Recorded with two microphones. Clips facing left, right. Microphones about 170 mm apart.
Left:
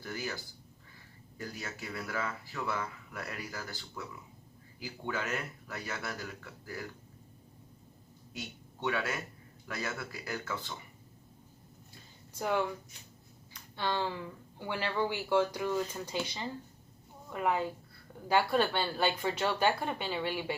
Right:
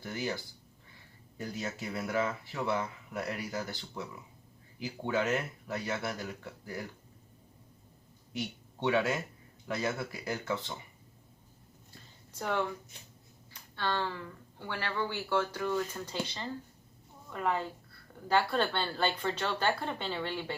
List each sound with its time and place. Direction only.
0.0 s speech: 20° right (ahead or behind)
1.4 s speech: 20° right (ahead or behind)
8.3 s speech: 25° right (ahead or behind)
12.4 s a woman's voice: 10° left (ahead or behind)
13.7 s a woman's voice: 15° left (ahead or behind)